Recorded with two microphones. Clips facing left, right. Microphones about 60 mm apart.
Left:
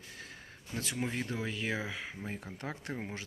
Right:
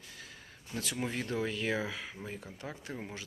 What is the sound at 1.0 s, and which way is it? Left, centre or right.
Speech, centre.